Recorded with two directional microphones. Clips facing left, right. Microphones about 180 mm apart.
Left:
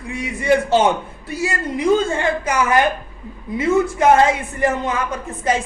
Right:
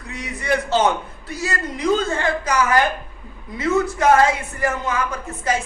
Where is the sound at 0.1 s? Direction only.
10° left (ahead or behind).